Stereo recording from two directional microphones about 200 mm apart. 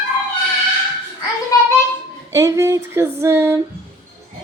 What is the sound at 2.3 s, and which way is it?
Speech, 15° right (ahead or behind).